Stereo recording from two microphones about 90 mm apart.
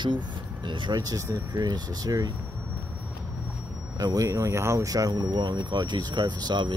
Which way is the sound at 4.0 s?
45° right (ahead or behind).